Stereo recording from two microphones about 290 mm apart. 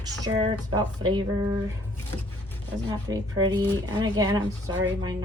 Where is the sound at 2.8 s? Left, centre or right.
Centre.